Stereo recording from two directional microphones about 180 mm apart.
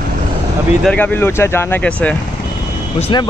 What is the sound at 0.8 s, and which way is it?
Speech, 10° left (ahead or behind).